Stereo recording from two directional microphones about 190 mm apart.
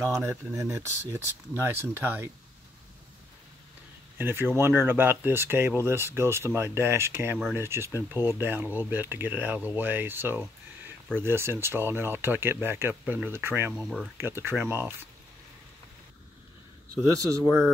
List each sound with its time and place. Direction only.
0.0 s speech: 15° right (ahead or behind)
4.2 s speech: 10° right (ahead or behind)
13.7 s speech: centre (ahead or behind)
14.1 s speech: 10° right (ahead or behind)
17.4 s speech: 15° right (ahead or behind)